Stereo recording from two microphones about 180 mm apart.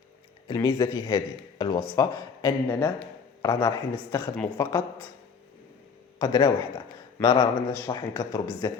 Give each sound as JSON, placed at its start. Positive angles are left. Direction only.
{"t": 0.4, "sound": "speech", "side_deg": 20}
{"t": 6.1, "sound": "speech", "side_deg": 20}